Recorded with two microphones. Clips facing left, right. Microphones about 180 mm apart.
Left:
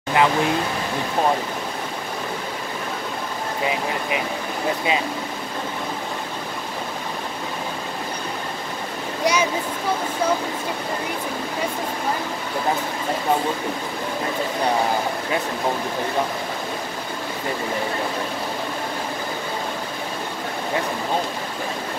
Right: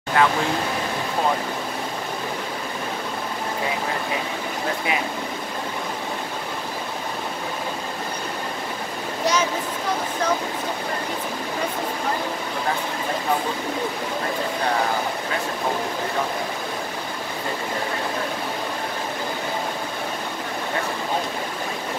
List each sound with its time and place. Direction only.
0.2 s speech: 15° left (ahead or behind)
9.2 s speech: 10° left (ahead or behind)